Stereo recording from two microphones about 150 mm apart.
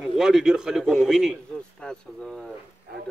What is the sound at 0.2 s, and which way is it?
A man's voice, 5° right (ahead or behind).